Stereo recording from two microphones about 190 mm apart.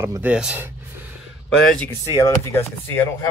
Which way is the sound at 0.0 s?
10° right (ahead or behind).